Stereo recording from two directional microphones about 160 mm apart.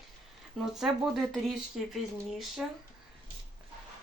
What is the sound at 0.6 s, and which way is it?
Speech, 5° right (ahead or behind).